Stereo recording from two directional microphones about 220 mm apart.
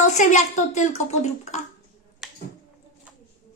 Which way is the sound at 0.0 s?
35° left (ahead or behind).